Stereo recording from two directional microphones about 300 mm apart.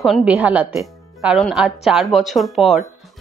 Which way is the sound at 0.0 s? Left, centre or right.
Centre.